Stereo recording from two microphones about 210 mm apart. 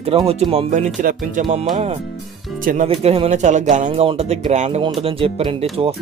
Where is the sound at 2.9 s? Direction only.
25° right (ahead or behind).